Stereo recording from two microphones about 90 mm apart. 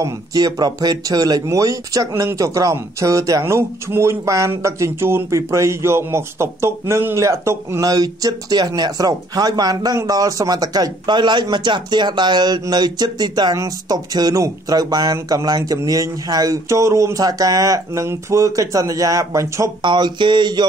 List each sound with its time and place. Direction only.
0.0 s speech: 45° right (ahead or behind)
7.8 s speech: 45° right (ahead or behind)
19.8 s speech: 60° right (ahead or behind)